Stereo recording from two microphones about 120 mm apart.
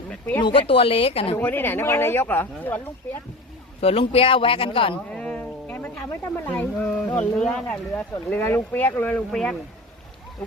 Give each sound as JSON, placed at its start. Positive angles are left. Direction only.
{"t": 0.1, "sound": "a sound", "side_deg": 15}
{"t": 0.7, "sound": "speech", "side_deg": 50}
{"t": 1.4, "sound": "speech", "side_deg": 15}
{"t": 3.8, "sound": "speech", "side_deg": 55}
{"t": 5.1, "sound": "a sound", "side_deg": 5}
{"t": 7.3, "sound": "speech", "side_deg": 5}